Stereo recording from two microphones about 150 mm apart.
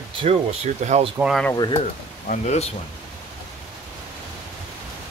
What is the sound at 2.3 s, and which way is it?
Speech, 45° left (ahead or behind).